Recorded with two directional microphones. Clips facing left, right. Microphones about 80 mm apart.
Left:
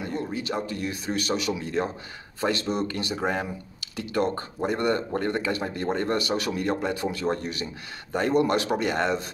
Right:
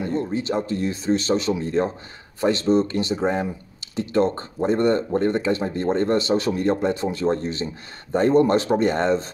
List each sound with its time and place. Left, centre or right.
0.1 s speech: right